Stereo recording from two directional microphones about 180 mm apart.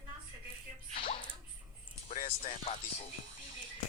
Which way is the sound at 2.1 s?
35° left (ahead or behind).